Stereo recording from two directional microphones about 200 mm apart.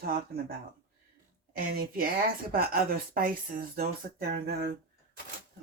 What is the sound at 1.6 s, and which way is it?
Speech, 45° right (ahead or behind).